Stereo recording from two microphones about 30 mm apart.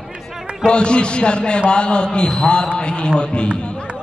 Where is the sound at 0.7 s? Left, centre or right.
Left.